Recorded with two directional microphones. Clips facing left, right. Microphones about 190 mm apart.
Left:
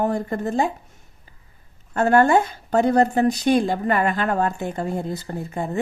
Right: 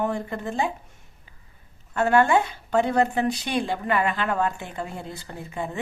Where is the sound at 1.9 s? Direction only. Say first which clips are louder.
Left 3 dB; 40° left (ahead or behind).